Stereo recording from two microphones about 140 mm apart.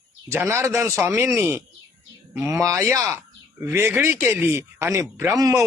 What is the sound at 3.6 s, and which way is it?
A man's voice, 20° right (ahead or behind).